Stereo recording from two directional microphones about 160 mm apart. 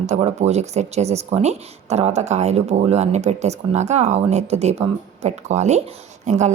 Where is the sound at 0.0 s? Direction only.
45° right (ahead or behind).